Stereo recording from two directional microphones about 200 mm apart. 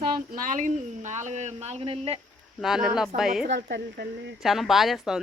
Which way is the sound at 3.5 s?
60° right (ahead or behind).